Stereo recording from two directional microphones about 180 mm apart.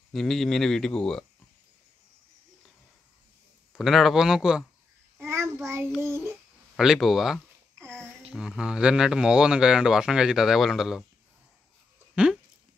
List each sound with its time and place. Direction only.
0.1 s speech: centre (ahead or behind)
3.7 s speech: centre (ahead or behind)
5.2 s child singing: 15° right (ahead or behind)
5.9 s a child's voice: 15° right (ahead or behind)
6.8 s speech: centre (ahead or behind)
7.8 s a sound: 15° right (ahead or behind)
8.3 s speech: 5° right (ahead or behind)
12.2 s a sound: 5° right (ahead or behind)